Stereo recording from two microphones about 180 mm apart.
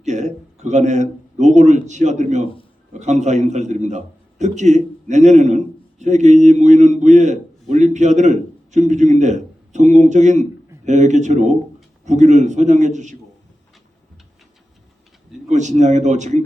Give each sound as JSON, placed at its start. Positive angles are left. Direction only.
{"t": 0.0, "sound": "a man's voice", "side_deg": -40}
{"t": 15.4, "sound": "a man's voice", "side_deg": -40}